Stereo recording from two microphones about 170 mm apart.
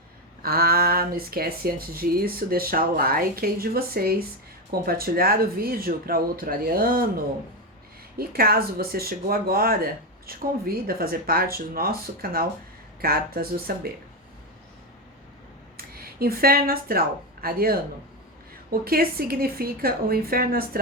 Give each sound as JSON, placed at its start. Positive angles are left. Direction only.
{"t": 0.4, "sound": "speech", "side_deg": -60}
{"t": 8.2, "sound": "speech", "side_deg": -60}
{"t": 15.8, "sound": "speech", "side_deg": -60}